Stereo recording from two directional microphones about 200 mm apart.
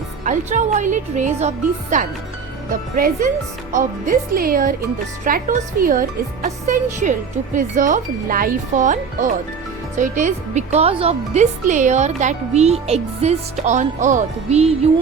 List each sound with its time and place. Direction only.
0.3 s speech: 40° right (ahead or behind)